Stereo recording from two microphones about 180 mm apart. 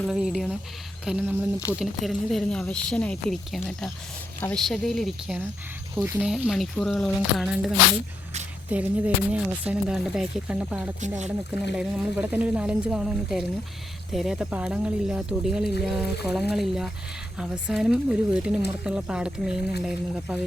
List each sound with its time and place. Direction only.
0.0 s speech: 5° right (ahead or behind)
8.7 s a woman's voice: 10° right (ahead or behind)